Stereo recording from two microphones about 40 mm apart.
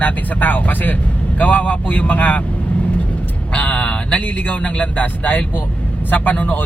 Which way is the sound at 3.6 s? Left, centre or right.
Left.